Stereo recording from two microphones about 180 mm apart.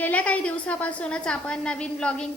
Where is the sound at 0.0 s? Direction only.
10° left (ahead or behind).